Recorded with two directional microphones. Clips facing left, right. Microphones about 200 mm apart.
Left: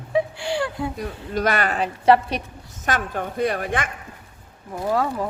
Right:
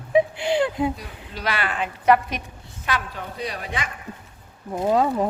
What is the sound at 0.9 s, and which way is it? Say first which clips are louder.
Speech: left 11 dB; 50° left (ahead or behind).